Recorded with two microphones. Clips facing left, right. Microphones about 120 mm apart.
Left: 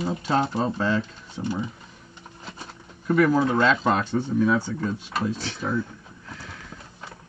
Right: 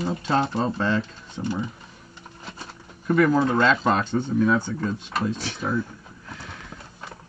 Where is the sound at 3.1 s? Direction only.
5° left (ahead or behind).